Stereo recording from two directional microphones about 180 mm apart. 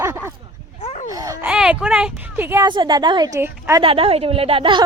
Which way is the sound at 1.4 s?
5° right (ahead or behind).